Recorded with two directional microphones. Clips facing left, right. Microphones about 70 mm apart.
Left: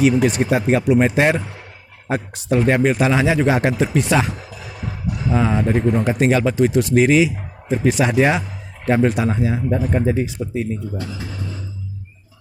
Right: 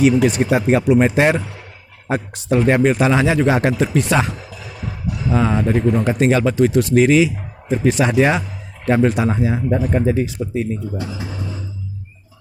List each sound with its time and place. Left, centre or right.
0.0 s speech: centre
4.4 s music: left
5.3 s speech: centre
5.7 s speech: left
6.1 s speech: centre
9.2 s speech: centre
9.9 s speech: centre
10.9 s speech: centre